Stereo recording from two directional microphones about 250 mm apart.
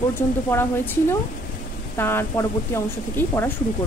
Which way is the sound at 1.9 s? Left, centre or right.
Centre.